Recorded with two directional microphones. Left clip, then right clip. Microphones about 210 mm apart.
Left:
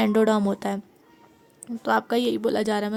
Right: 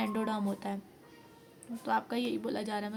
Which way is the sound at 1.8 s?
55° left (ahead or behind).